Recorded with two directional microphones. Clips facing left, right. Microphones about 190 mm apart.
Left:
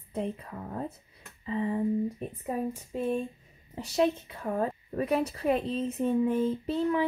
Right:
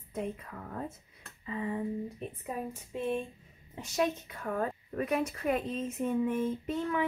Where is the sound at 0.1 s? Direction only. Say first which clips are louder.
Left 3 dB; 30° left (ahead or behind).